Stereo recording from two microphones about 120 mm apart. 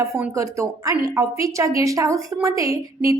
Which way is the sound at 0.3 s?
25° right (ahead or behind).